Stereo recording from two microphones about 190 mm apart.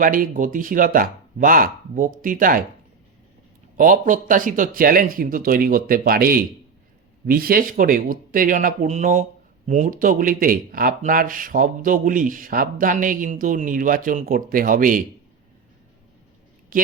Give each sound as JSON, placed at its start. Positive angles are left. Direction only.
{"t": 0.0, "sound": "speech", "side_deg": -45}
{"t": 3.8, "sound": "speech", "side_deg": -45}
{"t": 16.7, "sound": "a sound", "side_deg": -50}